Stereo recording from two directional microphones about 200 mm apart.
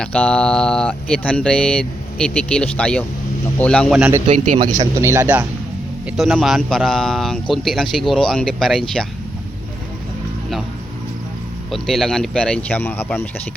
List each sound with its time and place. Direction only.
0.0 s speech: 5° left (ahead or behind)
4.3 s a man's voice: 40° right (ahead or behind)
4.8 s speech: 15° right (ahead or behind); by 8.8 s 5° left (ahead or behind)
11.7 s speech: centre (ahead or behind)